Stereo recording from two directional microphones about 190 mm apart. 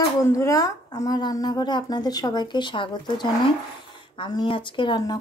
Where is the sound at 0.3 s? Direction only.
15° left (ahead or behind).